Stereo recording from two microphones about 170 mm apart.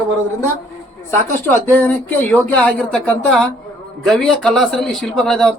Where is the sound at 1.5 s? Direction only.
10° left (ahead or behind).